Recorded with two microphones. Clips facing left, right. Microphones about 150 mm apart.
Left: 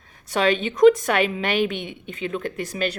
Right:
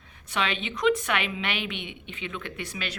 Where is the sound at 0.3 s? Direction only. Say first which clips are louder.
Left 9 dB; 40° left (ahead or behind).